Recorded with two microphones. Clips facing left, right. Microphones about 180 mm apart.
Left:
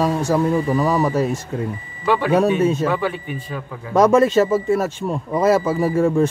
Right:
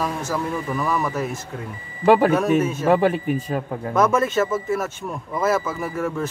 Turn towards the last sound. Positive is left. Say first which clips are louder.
# left 9 dB
turn(degrees=30)  # may be behind; listen again after turning